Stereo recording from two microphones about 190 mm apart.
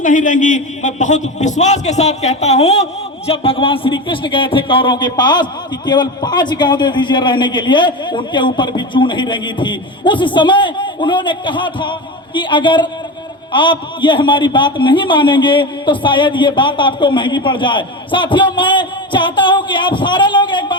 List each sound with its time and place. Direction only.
0.0 s a man's voice: 45° left (ahead or behind); by 20.7 s 25° left (ahead or behind)